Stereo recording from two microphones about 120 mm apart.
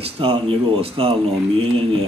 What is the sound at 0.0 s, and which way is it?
A man's voice, 50° right (ahead or behind).